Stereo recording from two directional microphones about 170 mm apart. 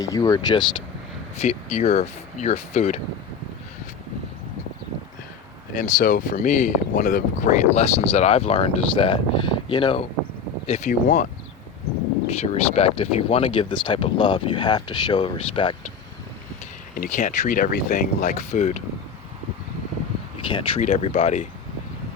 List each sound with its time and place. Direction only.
0.0 s speech: 20° left (ahead or behind)
1.4 s speech: 40° left (ahead or behind)
5.7 s speech: 50° left (ahead or behind); by 10.1 s 30° left (ahead or behind)
10.7 s speech: 45° left (ahead or behind)
12.3 s speech: 40° left (ahead or behind)
16.9 s speech: 50° left (ahead or behind)
20.5 s speech: 35° left (ahead or behind)
20.8 s speech: 45° left (ahead or behind)